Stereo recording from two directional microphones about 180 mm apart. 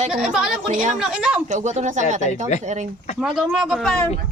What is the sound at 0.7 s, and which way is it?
Speech, 45° right (ahead or behind).